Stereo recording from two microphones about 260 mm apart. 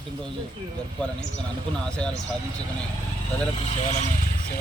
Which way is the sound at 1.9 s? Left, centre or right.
Centre.